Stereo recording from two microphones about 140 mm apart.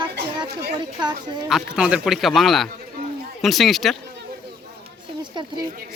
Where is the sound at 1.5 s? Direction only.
5° right (ahead or behind).